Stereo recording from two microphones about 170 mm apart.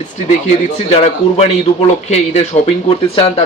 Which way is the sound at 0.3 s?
40° left (ahead or behind).